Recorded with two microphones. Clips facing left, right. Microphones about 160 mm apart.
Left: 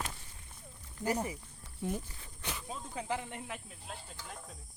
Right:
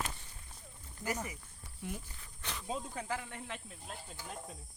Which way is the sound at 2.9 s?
20° left (ahead or behind).